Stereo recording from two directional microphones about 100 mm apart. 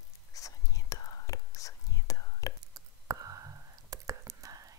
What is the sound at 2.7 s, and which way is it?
Whispering, 35° right (ahead or behind).